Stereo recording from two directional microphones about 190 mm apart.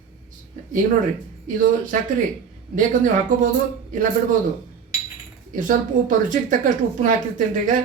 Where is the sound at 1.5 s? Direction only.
45° right (ahead or behind).